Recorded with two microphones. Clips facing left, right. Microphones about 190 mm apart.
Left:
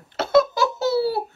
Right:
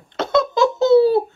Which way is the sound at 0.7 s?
20° right (ahead or behind).